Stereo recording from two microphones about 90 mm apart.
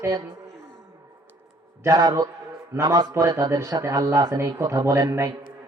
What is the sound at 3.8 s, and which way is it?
Speech, 35° right (ahead or behind).